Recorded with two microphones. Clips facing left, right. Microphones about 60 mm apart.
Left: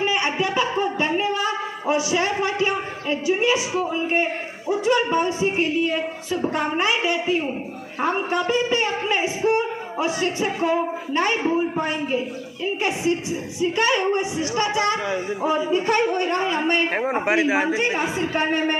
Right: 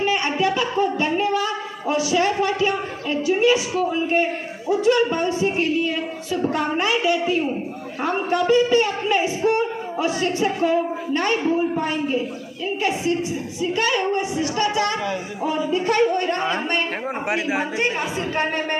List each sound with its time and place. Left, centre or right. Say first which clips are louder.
0.0 s a sound: right 2 dB; centre
4.8 s speech: right 1 dB; centre
13.6 s speech: left 1 dB; centre
16.9 s speech: left 4 dB; left
17.7 s speech: left 1 dB; centre